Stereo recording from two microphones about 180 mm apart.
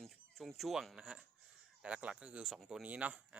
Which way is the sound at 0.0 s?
Centre (ahead or behind).